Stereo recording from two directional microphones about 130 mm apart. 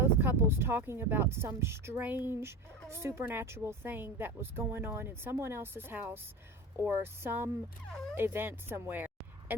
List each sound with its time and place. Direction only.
0.0 s a woman's voice: 15° right (ahead or behind)